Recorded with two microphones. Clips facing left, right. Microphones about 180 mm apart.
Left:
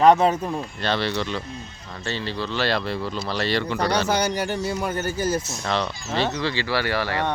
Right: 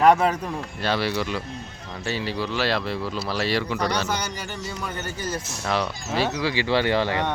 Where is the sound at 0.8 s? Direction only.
5° right (ahead or behind).